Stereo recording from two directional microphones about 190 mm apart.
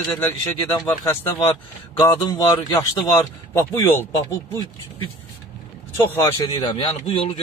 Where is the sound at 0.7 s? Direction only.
15° left (ahead or behind).